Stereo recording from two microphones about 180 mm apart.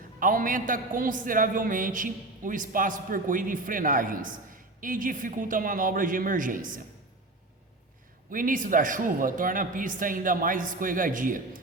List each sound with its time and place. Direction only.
0.2 s a man's voice: 50° right (ahead or behind)
8.3 s a man's voice: 50° right (ahead or behind)